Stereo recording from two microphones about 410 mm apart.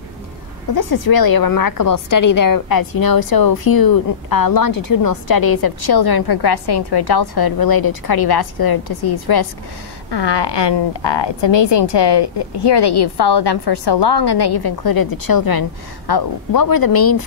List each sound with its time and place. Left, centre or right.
0.7 s a woman's voice: left
10.1 s a woman's voice: left